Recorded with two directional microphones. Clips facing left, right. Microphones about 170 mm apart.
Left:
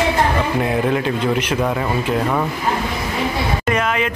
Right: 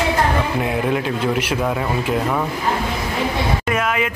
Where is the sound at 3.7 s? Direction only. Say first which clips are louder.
Left 4 dB; 5° right (ahead or behind).